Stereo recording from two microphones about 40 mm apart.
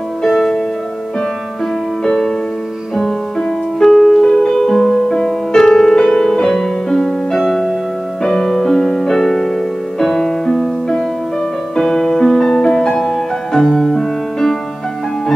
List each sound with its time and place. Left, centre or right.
0.2 s music: centre
2.0 s music: centre
3.8 s music: centre
13.6 s music: centre